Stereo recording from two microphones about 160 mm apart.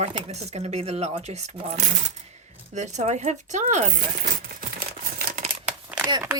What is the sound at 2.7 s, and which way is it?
Speech, 45° right (ahead or behind).